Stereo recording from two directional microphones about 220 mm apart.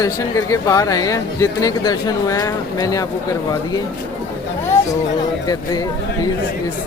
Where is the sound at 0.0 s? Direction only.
15° left (ahead or behind).